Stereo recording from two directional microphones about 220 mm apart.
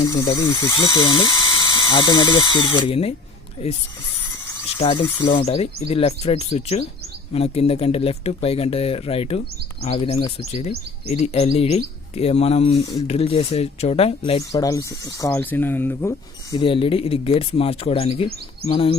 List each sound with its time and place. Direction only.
0.1 s speech: 15° left (ahead or behind)
4.8 s speech: 25° left (ahead or behind)
14.5 s speech: 15° left (ahead or behind)